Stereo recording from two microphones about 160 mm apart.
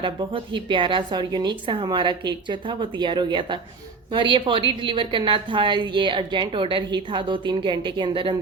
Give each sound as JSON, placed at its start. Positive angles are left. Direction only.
{"t": 0.0, "sound": "a woman's voice", "side_deg": -30}